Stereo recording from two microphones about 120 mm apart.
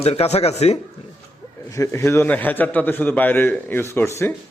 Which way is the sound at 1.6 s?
25° left (ahead or behind).